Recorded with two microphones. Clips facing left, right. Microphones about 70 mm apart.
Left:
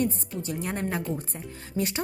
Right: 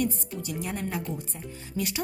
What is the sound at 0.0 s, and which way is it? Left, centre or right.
Speech, left.